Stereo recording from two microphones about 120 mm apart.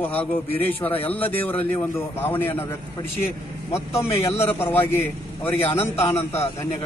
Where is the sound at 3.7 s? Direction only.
20° left (ahead or behind).